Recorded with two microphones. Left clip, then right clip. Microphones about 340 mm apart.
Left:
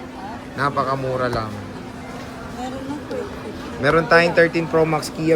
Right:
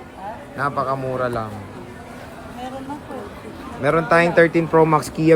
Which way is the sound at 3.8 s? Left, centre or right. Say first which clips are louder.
Left 1 dB; centre.